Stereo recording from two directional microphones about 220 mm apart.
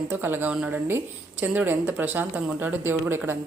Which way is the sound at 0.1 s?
10° right (ahead or behind).